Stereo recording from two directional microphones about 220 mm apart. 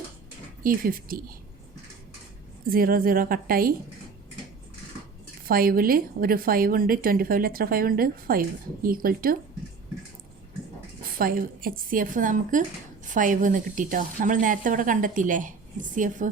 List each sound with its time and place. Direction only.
0.6 s a woman's voice: 40° right (ahead or behind)
2.6 s a woman's voice: 40° right (ahead or behind)
5.5 s a woman's voice: 40° right (ahead or behind)
11.0 s a woman's voice: 40° right (ahead or behind)